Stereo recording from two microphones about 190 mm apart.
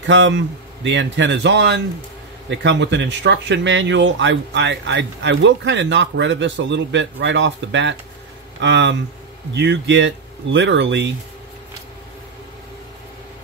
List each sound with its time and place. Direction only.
0.0 s speech: 75° right (ahead or behind)